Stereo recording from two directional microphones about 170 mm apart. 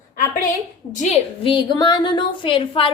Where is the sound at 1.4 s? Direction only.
30° left (ahead or behind).